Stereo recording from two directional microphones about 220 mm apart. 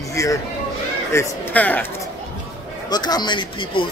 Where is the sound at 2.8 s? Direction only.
20° left (ahead or behind).